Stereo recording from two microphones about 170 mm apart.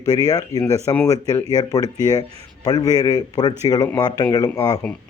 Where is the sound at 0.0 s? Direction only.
20° left (ahead or behind).